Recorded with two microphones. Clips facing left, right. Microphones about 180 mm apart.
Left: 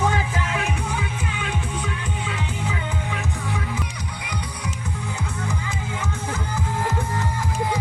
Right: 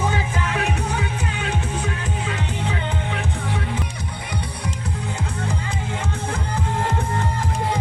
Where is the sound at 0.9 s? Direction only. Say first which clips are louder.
Right 2 dB; 40° right (ahead or behind).